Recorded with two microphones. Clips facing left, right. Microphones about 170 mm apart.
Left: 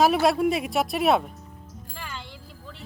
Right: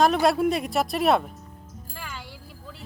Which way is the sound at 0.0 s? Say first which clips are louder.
Even; 5° left (ahead or behind).